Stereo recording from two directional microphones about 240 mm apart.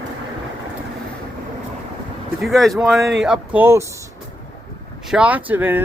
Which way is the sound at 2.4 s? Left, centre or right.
Centre.